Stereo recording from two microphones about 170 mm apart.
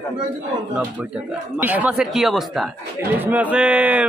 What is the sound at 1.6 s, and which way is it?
Speech, 10° right (ahead or behind).